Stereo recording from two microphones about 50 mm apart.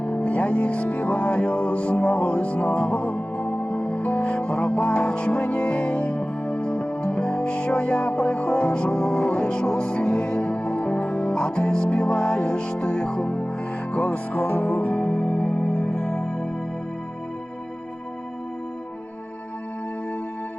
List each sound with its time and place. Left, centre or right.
0.0 s music: left